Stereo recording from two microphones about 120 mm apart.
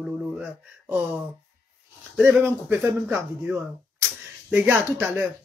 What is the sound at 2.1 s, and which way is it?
Speech, 10° right (ahead or behind).